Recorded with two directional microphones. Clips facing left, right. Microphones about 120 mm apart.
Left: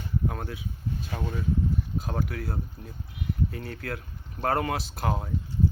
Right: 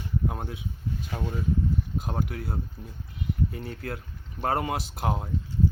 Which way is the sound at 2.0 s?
20° right (ahead or behind).